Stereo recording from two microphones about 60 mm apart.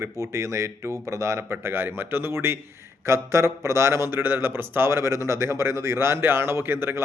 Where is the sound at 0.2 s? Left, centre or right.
Right.